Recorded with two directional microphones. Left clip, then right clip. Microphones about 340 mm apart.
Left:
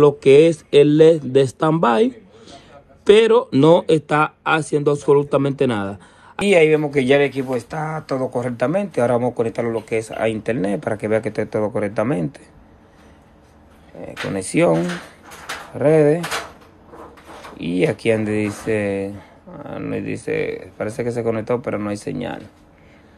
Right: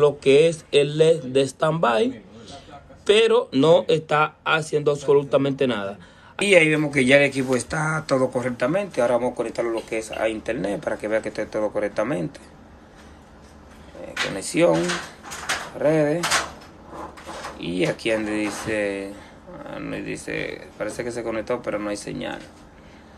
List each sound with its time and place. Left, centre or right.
0.0 s speech: centre
14.0 s speech: centre
15.8 s speech: centre
17.6 s speech: centre